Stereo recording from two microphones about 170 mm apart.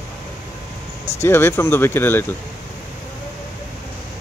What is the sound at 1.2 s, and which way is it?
Speech, 15° left (ahead or behind).